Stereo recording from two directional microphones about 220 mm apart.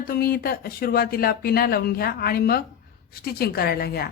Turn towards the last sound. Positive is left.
turn(degrees=45)  # may be behind; listen again after turning